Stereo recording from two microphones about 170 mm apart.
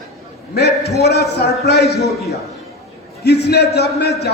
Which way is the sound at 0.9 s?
75° left (ahead or behind).